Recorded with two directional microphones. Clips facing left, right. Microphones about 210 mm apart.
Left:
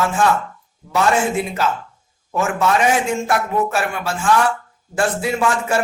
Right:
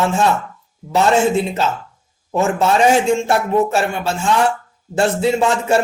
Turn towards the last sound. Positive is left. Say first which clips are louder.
# right 3 dB
turn(degrees=-25)  # may be behind; listen again after turning